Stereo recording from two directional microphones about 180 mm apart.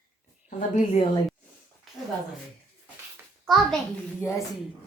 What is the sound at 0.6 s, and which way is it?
Speech, 45° left (ahead or behind).